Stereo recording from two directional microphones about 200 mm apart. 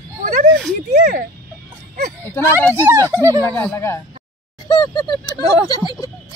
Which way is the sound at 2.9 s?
15° right (ahead or behind).